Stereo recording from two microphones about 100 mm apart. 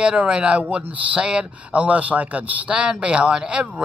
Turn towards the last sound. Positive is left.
turn(degrees=-10)  # may be behind; listen again after turning